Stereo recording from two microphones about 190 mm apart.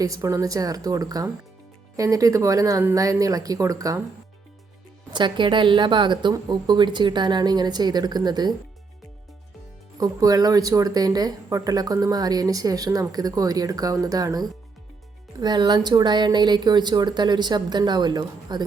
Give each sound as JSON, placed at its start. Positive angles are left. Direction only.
{"t": 0.0, "sound": "speech", "side_deg": -15}
{"t": 5.1, "sound": "speech", "side_deg": -25}
{"t": 10.0, "sound": "speech", "side_deg": -20}